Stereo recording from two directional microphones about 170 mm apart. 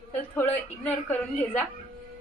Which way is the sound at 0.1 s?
10° left (ahead or behind).